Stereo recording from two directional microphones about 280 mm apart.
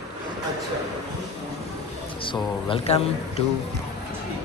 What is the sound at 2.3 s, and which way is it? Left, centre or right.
Speech, centre.